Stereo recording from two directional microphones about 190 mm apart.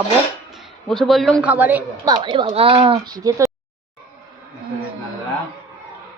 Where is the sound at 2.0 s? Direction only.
25° right (ahead or behind).